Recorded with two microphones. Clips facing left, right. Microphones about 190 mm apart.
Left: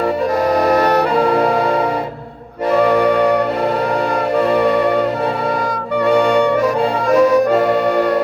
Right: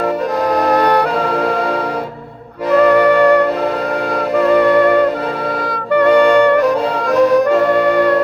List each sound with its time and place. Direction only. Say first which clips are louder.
0.6 s music: right 2 dB; 60° right (ahead or behind)
5.9 s music: right 4 dB; 60° right (ahead or behind)